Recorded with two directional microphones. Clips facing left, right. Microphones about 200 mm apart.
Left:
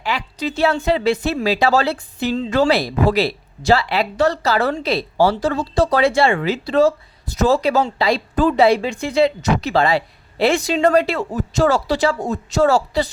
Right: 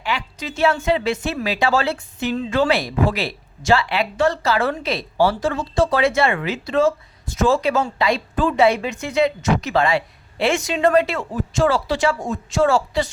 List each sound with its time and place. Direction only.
0.0 s speech: 35° left (ahead or behind)